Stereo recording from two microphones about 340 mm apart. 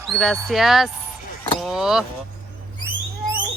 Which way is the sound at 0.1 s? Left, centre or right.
Centre.